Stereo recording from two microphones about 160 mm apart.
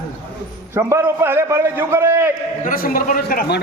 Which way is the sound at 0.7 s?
15° right (ahead or behind).